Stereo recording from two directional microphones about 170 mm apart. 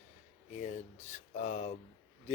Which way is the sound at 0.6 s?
45° left (ahead or behind).